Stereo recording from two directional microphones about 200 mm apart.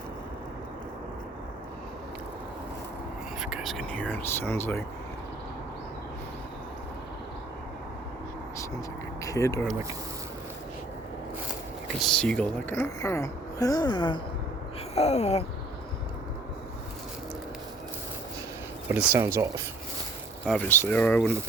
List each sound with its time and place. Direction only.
3.4 s a woman's voice: centre (ahead or behind)
9.2 s speech: 15° left (ahead or behind)
12.2 s a woman's voice: 5° left (ahead or behind); by 14.2 s 20° left (ahead or behind)
14.9 s a sound: 35° left (ahead or behind)
18.9 s speech: 10° right (ahead or behind)
20.5 s a woman's voice: 10° left (ahead or behind)